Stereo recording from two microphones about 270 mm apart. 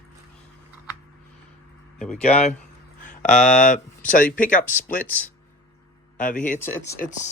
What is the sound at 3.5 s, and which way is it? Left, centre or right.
A man's voice, left.